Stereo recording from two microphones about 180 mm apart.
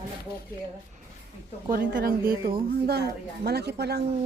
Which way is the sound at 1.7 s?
50° right (ahead or behind).